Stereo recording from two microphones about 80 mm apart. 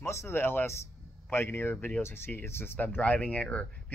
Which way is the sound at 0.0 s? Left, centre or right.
Left.